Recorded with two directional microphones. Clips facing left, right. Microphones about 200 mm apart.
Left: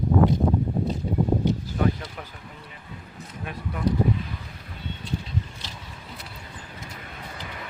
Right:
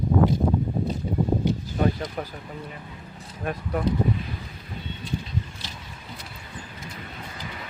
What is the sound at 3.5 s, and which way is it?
Speech, 45° right (ahead or behind).